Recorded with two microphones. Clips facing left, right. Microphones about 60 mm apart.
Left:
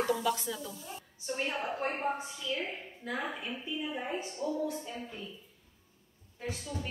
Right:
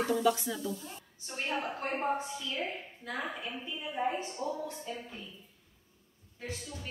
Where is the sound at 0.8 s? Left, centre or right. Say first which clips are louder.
Left 6 dB; centre.